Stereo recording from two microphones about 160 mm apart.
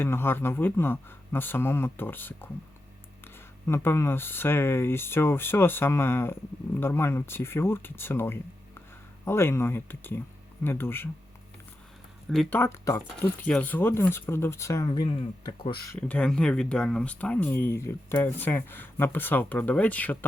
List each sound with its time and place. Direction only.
0.0 s speech: 15° left (ahead or behind)
3.7 s speech: 15° left (ahead or behind)
12.3 s speech: centre (ahead or behind)
12.5 s speech: 15° left (ahead or behind)
14.8 s speech: 30° left (ahead or behind)
16.0 s speech: 5° left (ahead or behind)